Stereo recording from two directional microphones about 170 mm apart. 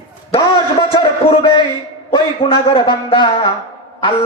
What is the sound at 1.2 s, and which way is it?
A man's voice, 35° left (ahead or behind).